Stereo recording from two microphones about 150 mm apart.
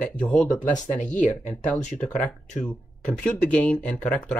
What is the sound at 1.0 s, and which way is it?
Speech, 55° left (ahead or behind).